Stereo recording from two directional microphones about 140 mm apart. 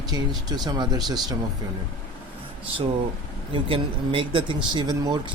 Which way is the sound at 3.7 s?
40° right (ahead or behind).